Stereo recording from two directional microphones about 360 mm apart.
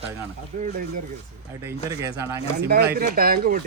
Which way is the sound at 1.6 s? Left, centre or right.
Centre.